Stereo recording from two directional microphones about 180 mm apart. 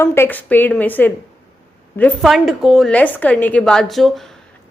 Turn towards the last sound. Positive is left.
turn(degrees=0)  # may be behind; listen again after turning